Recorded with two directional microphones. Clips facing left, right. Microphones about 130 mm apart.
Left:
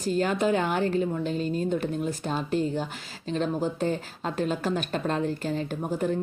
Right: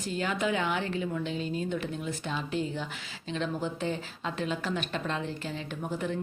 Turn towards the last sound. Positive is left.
turn(degrees=40)  # may be behind; listen again after turning